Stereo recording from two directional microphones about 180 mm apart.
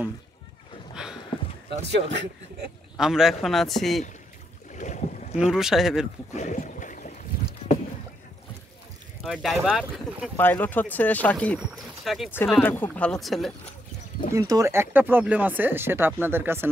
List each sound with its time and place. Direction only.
1.0 s a sound: 5° right (ahead or behind)
1.7 s speech: 35° right (ahead or behind)
3.0 s speech: centre (ahead or behind)
4.7 s boat: 40° left (ahead or behind)
5.4 s speech: 5° right (ahead or behind)
6.3 s a sound: 40° left (ahead or behind)
9.2 s speech: centre (ahead or behind)
10.3 s speech: 10° left (ahead or behind)
14.3 s speech: 20° right (ahead or behind)